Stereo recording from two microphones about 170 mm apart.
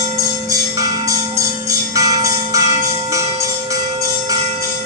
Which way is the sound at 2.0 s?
20° right (ahead or behind).